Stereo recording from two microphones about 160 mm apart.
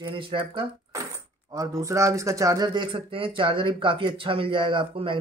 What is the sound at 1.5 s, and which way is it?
Speech, 20° right (ahead or behind).